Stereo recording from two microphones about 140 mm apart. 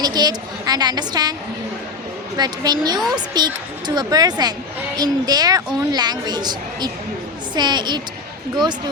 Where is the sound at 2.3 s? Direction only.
30° right (ahead or behind).